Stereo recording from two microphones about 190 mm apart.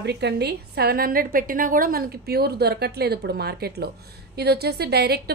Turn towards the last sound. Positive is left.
turn(degrees=-60)  # may be behind; listen again after turning